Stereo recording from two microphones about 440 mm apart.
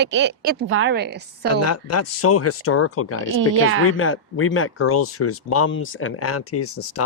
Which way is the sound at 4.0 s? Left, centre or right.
Left.